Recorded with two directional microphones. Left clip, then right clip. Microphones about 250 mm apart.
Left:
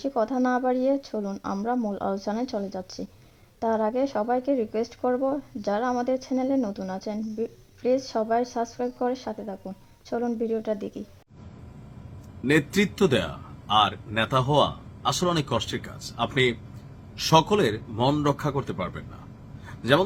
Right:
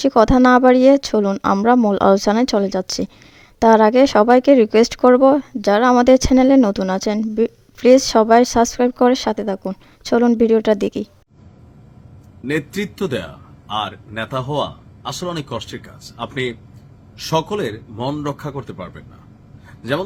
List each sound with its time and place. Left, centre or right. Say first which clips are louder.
0.0 s speech: right 13 dB; right
12.5 s a man's voice: even; centre